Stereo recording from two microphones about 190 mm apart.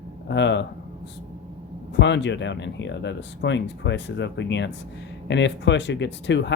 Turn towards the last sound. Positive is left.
turn(degrees=65)  # may be behind; listen again after turning